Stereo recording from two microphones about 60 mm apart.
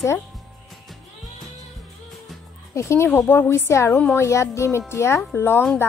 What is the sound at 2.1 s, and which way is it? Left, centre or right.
Music, centre.